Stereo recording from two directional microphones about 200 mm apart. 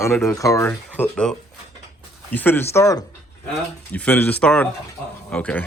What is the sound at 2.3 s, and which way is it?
Speech, 10° left (ahead or behind).